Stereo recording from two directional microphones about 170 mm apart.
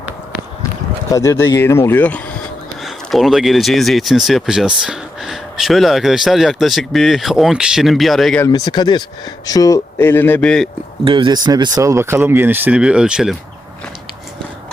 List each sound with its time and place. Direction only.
1.1 s speech: 20° left (ahead or behind); by 8.4 s centre (ahead or behind)
8.4 s speech: 20° left (ahead or behind); by 10.7 s 5° left (ahead or behind)
11.0 s speech: 30° right (ahead or behind); by 13.3 s 5° right (ahead or behind)